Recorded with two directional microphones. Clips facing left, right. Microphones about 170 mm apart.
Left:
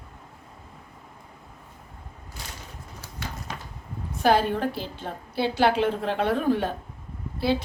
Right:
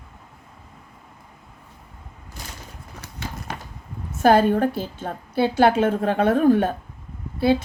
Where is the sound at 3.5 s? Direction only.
65° right (ahead or behind).